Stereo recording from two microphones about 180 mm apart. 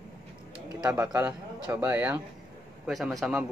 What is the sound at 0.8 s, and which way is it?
A man's voice, 10° right (ahead or behind).